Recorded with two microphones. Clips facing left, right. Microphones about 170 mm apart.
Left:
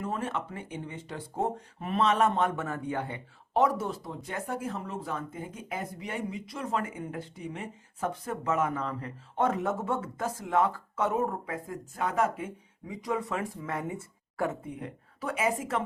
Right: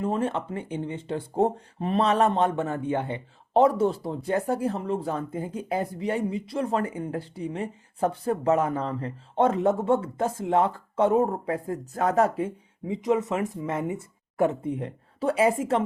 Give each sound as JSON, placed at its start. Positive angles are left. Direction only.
{"t": 0.0, "sound": "speech", "side_deg": -30}
{"t": 12.9, "sound": "speech", "side_deg": -20}